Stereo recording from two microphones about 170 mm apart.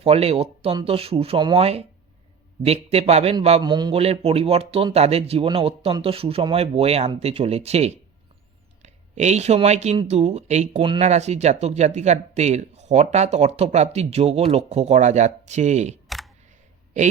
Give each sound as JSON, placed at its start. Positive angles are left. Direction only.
{"t": 0.0, "sound": "speech", "side_deg": -35}
{"t": 3.6, "sound": "speech", "side_deg": -25}
{"t": 16.0, "sound": "computer keyboard", "side_deg": 0}